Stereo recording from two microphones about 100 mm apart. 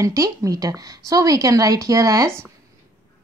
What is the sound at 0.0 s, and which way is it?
A woman's voice, 35° right (ahead or behind).